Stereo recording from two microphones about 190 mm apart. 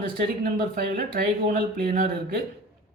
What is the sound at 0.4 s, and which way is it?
Speech, 55° right (ahead or behind).